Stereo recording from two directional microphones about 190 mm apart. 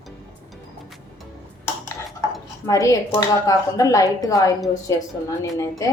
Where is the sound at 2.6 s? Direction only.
15° left (ahead or behind).